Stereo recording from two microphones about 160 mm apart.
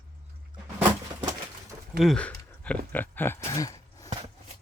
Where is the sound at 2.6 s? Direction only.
10° left (ahead or behind).